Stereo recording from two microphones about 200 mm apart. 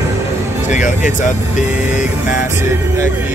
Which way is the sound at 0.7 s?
40° left (ahead or behind).